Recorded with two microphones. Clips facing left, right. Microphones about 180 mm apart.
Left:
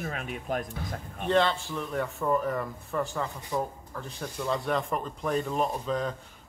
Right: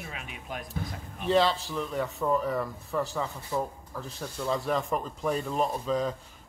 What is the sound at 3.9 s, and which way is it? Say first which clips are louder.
Speech: even; centre (ahead or behind).